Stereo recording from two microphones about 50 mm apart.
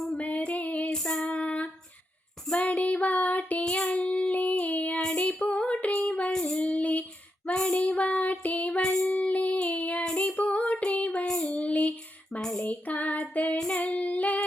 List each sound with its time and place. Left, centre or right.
0.2 s female singing: left
2.5 s child singing: left
6.4 s female singing: left
9.0 s child singing: left
13.7 s female singing: left